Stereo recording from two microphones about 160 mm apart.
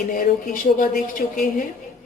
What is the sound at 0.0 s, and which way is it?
Speech, 60° left (ahead or behind).